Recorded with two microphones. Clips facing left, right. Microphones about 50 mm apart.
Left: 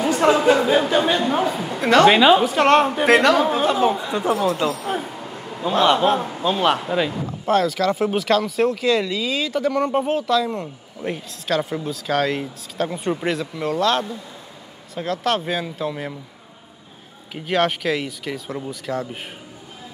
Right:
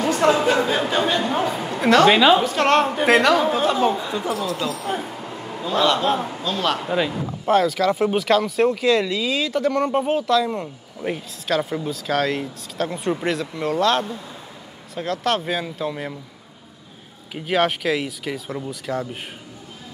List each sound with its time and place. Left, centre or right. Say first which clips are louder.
0.0 s speech: left 1 dB; centre
4.3 s speech: left 7 dB; left
4.7 s a sound: left 1 dB; centre
5.6 s a man's voice: left 2 dB; centre
6.0 s speech: left 2 dB; centre
6.4 s speech: left 6 dB; centre
6.8 s speech: even; centre
17.3 s speech: even; centre